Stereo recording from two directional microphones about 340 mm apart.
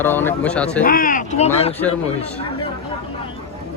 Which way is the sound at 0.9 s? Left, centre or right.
Left.